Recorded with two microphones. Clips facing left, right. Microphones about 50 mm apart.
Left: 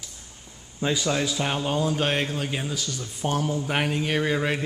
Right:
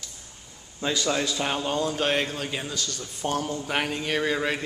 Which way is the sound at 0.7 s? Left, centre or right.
Centre.